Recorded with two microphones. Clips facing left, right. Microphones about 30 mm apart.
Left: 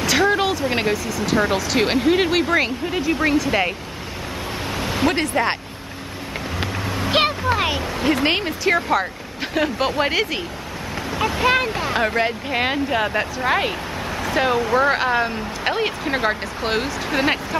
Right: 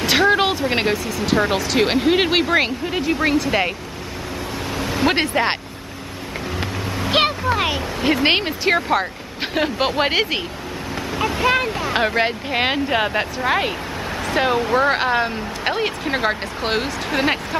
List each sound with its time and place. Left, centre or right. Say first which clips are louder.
0.0 s speech: right 2 dB; right
4.7 s a sound: right 1 dB; centre
5.0 s speech: right 2 dB; right
7.1 s a sound: right 1 dB; centre
7.5 s speech: even; centre
8.2 s speech: right 2 dB; right
11.1 s a sound: even; centre
12.2 s speech: right 1 dB; right
13.4 s speech: even; centre